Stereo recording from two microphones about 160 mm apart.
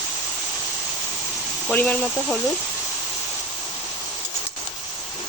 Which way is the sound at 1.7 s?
10° left (ahead or behind).